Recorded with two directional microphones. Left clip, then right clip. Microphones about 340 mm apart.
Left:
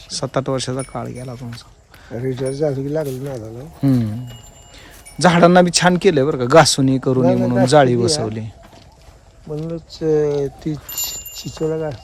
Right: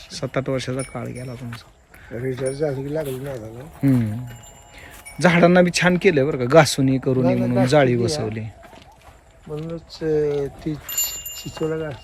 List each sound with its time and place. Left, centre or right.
0.1 s speech: centre
2.2 s speech: left
3.8 s speech: centre
5.2 s speech: centre
9.6 s speech: left